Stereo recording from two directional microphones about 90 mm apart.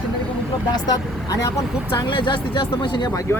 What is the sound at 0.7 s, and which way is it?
Speech, 40° left (ahead or behind).